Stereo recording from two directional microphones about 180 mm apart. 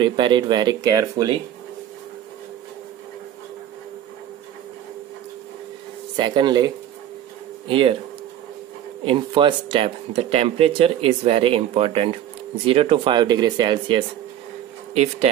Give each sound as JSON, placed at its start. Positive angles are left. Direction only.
{"t": 0.0, "sound": "speech", "side_deg": -25}
{"t": 6.1, "sound": "speech", "side_deg": -25}
{"t": 9.0, "sound": "speech", "side_deg": -30}